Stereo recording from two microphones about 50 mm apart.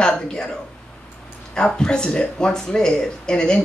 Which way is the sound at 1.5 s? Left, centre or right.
Centre.